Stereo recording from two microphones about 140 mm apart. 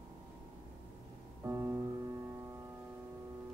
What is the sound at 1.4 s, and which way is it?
Music, 15° right (ahead or behind).